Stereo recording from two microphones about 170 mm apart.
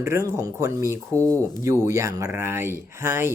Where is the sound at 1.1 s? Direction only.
10° left (ahead or behind).